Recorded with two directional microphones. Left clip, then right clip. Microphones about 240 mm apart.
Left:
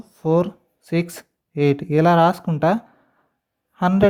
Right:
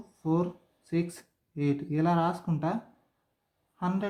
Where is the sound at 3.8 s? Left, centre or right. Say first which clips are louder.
Left 13 dB; left.